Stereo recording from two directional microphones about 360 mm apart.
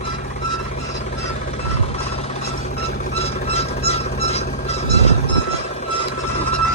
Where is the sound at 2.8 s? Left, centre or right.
Centre.